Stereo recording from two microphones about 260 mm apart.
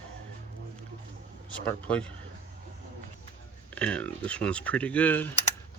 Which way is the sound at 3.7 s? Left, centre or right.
Centre.